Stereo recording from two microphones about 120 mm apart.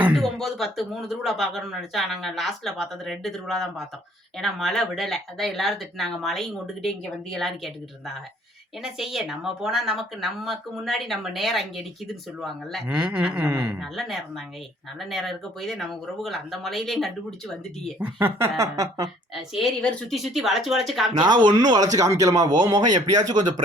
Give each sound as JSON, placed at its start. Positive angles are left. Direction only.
{"t": 0.2, "sound": "a woman's voice", "side_deg": 0}
{"t": 13.7, "sound": "a woman's voice", "side_deg": 0}
{"t": 18.0, "sound": "speech", "side_deg": -15}
{"t": 19.3, "sound": "a woman's voice", "side_deg": 0}
{"t": 21.5, "sound": "speech", "side_deg": -35}